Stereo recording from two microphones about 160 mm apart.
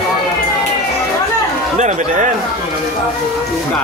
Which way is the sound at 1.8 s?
50° right (ahead or behind).